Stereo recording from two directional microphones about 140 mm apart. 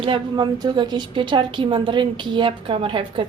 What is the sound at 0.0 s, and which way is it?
A woman's voice, 35° right (ahead or behind).